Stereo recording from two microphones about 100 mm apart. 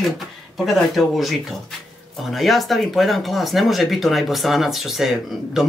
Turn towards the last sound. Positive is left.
turn(degrees=-5)  # may be behind; listen again after turning